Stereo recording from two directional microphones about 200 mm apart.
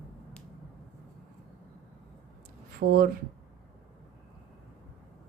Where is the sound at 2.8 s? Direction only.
50° right (ahead or behind).